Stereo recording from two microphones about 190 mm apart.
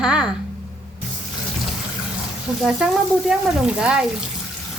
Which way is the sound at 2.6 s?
5° right (ahead or behind).